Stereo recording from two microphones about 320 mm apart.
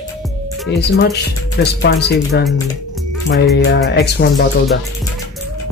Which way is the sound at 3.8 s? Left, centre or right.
Left.